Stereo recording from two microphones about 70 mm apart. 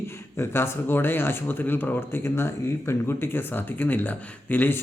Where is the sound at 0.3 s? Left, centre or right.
Left.